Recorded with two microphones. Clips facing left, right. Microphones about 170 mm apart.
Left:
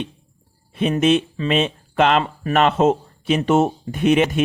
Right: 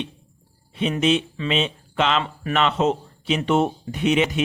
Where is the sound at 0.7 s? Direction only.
50° left (ahead or behind).